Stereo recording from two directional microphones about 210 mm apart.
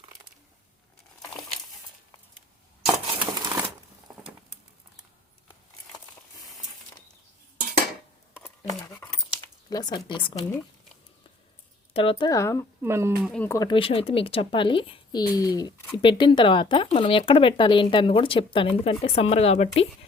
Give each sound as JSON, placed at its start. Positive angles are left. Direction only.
{"t": 3.3, "sound": "crumpling", "side_deg": -15}
{"t": 9.3, "sound": "speech", "side_deg": 20}
{"t": 11.9, "sound": "speech", "side_deg": 25}
{"t": 12.8, "sound": "speech", "side_deg": -10}
{"t": 13.3, "sound": "speech", "side_deg": 10}